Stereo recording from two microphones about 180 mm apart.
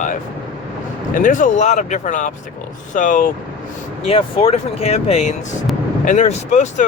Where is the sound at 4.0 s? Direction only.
30° left (ahead or behind).